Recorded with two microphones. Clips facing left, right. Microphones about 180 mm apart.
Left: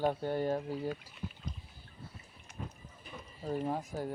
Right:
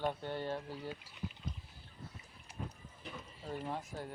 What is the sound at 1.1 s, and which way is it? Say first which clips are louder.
Speech: left 2 dB; 40° left (ahead or behind).